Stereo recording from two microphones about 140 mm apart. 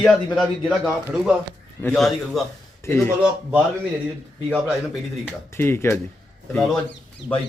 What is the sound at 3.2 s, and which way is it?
A man's voice, 10° right (ahead or behind).